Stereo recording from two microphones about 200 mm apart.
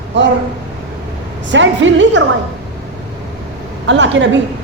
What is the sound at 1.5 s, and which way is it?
Speech, 65° right (ahead or behind).